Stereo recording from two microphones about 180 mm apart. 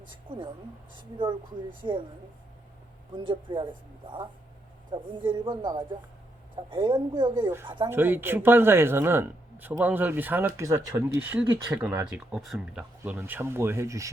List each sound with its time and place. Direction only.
0.3 s speech: 30° right (ahead or behind)
1.8 s speech: 25° right (ahead or behind)
3.2 s speech: 25° right (ahead or behind)
7.9 s speech: 10° right (ahead or behind)